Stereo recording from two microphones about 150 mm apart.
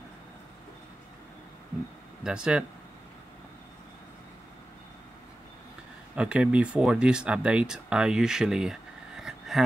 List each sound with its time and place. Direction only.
2.2 s speech: 5° right (ahead or behind)
6.1 s speech: 5° right (ahead or behind)